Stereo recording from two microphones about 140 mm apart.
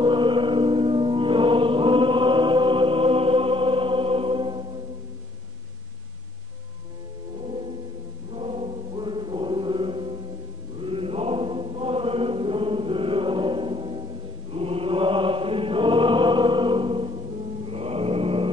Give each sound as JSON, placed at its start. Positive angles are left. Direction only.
{"t": 0.0, "sound": "music", "side_deg": -35}
{"t": 8.4, "sound": "chant", "side_deg": -45}
{"t": 17.6, "sound": "mantra", "side_deg": -45}